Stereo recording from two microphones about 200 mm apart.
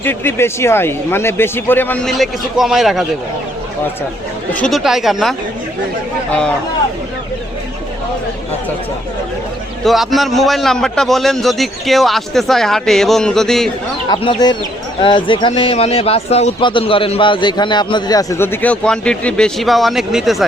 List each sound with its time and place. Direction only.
0.0 s a man's voice: 10° left (ahead or behind)
4.5 s a man's voice: centre (ahead or behind)
9.8 s a man's voice: centre (ahead or behind)
14.1 s a man's voice: 25° left (ahead or behind); by 20.5 s centre (ahead or behind)